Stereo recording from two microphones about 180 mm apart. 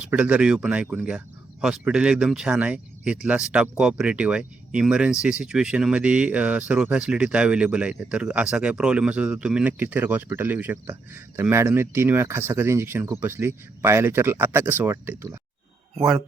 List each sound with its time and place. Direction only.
0.0 s speech: 5° right (ahead or behind)